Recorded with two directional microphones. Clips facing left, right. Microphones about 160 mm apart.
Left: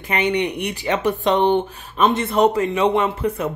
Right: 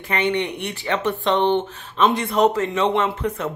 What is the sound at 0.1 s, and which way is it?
Speech, 15° left (ahead or behind).